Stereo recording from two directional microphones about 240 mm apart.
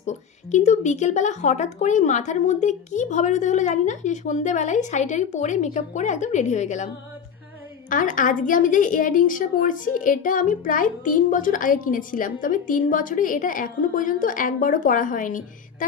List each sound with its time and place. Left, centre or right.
0.0 s a woman's voice: left